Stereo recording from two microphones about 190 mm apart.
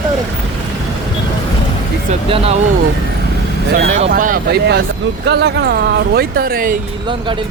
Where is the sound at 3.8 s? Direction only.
45° right (ahead or behind).